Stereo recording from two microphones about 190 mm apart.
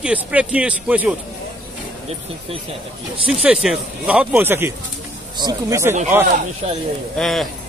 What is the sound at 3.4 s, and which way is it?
Speech, 5° right (ahead or behind).